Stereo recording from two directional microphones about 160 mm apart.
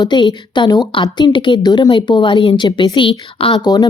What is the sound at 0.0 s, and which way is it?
A woman's voice, 30° left (ahead or behind).